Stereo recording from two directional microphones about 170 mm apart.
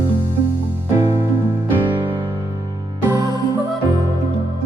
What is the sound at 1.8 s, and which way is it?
Music, 25° right (ahead or behind).